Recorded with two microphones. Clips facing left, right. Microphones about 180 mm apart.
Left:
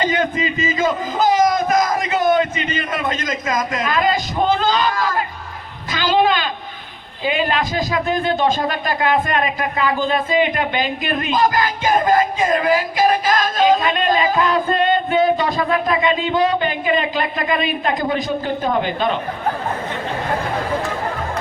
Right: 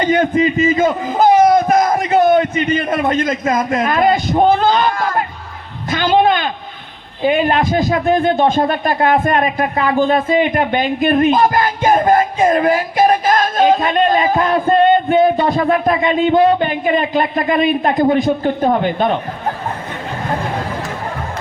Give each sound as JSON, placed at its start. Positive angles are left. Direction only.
{"t": 0.0, "sound": "a man's voice", "side_deg": -55}
{"t": 3.7, "sound": "a sound", "side_deg": -55}
{"t": 5.9, "sound": "a man's voice", "side_deg": -55}